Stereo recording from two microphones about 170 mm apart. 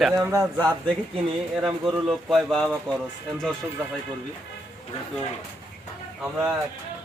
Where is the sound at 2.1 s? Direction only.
Centre (ahead or behind).